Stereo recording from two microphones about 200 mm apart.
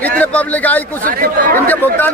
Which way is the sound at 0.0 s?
5° left (ahead or behind).